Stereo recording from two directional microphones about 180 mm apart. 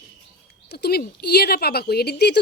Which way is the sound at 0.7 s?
60° left (ahead or behind).